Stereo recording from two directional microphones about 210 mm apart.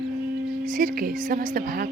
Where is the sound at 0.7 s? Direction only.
45° right (ahead or behind).